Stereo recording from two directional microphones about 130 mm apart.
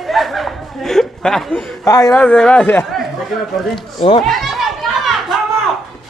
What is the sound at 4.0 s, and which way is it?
Speech, 40° left (ahead or behind).